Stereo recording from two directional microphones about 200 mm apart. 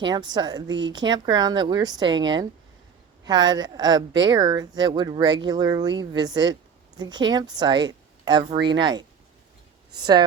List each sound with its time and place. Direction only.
0.0 s speech: 20° right (ahead or behind)